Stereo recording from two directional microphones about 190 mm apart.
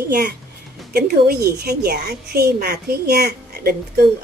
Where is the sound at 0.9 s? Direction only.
55° right (ahead or behind).